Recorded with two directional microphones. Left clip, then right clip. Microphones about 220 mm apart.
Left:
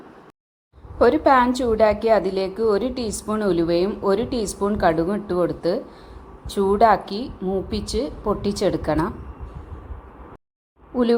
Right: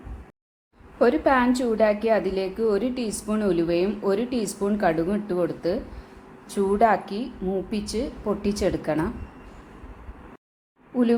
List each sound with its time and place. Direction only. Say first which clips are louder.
0.9 s a woman's voice: left 4 dB; 10° left (ahead or behind)